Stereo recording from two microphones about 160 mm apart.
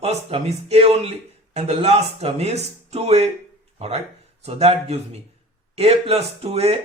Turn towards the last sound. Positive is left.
turn(degrees=-40)  # may be behind; listen again after turning